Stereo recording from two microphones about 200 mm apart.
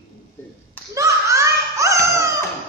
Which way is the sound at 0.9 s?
15° right (ahead or behind).